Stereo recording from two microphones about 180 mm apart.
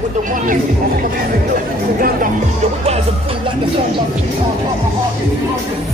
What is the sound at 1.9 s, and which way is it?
Speech, 50° right (ahead or behind).